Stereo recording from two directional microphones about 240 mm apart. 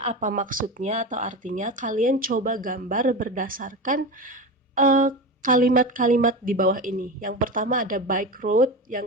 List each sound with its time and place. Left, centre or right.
0.0 s speech: right